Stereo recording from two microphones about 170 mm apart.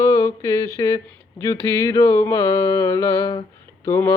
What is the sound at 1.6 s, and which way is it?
Mantra, 15° left (ahead or behind).